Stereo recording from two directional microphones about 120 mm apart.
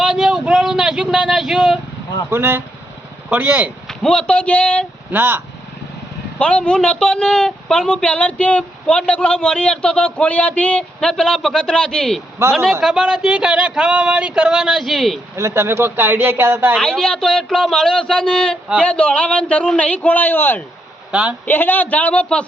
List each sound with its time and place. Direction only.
0.0 s a sound: 5° right (ahead or behind)
2.3 s speech: 20° right (ahead or behind)
3.2 s a sound: 15° right (ahead or behind)
3.8 s speech: 5° left (ahead or behind)
5.1 s a sound: 15° right (ahead or behind)
6.4 s speech: 10° left (ahead or behind)
12.4 s speech: 20° right (ahead or behind)
12.8 s a sound: 5° right (ahead or behind)
15.4 s speech: 20° right (ahead or behind)
16.7 s a man's voice: 5° left (ahead or behind)
21.1 s a woman's voice: 10° right (ahead or behind)
21.4 s speech: 15° left (ahead or behind)